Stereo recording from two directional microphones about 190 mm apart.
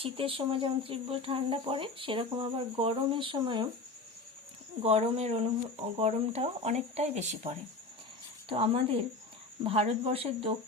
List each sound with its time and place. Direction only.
0.0 s speech: 30° right (ahead or behind)
4.8 s speech: 30° right (ahead or behind)